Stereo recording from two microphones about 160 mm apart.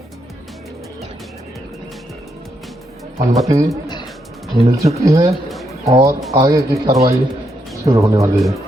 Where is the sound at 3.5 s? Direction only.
20° right (ahead or behind).